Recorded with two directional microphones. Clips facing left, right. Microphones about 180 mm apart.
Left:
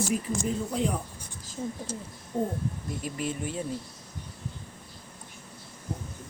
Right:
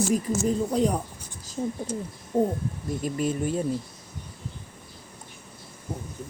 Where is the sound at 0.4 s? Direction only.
40° right (ahead or behind).